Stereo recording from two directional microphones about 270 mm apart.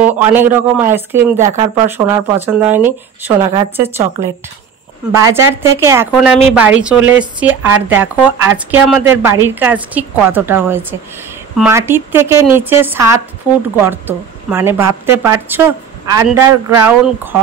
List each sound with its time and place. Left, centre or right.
0.0 s a woman's voice: centre
1.4 s speech: right
1.9 s a woman's voice: centre